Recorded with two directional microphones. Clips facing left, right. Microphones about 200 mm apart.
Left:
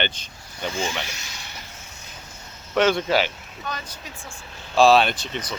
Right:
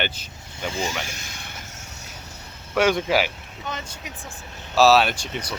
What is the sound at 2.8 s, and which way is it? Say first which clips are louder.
Speech: even; 10° right (ahead or behind).